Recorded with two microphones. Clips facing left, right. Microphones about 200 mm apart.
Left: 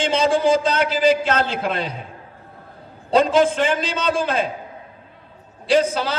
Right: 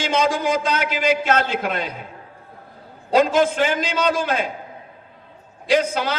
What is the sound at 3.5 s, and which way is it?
Speech, 30° left (ahead or behind).